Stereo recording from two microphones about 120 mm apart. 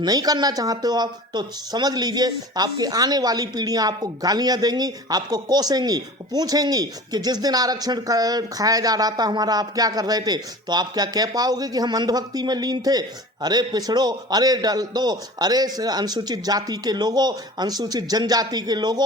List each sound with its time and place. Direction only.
0.0 s speech: 35° right (ahead or behind)